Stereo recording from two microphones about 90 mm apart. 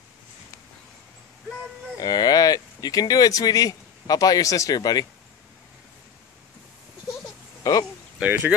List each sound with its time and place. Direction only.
2.0 s speech: 45° left (ahead or behind)
7.7 s a sound: 35° left (ahead or behind)
8.2 s speech: 15° right (ahead or behind)